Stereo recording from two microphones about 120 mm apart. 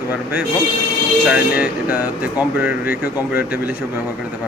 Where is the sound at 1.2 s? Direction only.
10° right (ahead or behind).